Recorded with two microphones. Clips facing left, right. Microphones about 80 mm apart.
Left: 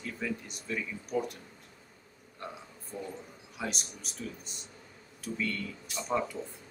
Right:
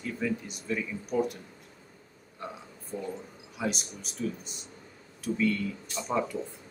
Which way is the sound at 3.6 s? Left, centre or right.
Centre.